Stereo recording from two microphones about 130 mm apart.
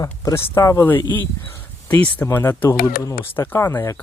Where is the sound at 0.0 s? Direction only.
25° left (ahead or behind).